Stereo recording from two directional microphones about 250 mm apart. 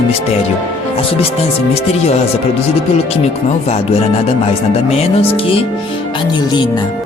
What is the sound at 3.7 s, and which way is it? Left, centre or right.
Speech, left.